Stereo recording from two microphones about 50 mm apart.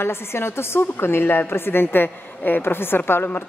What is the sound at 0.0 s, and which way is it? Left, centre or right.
A woman's voice, left.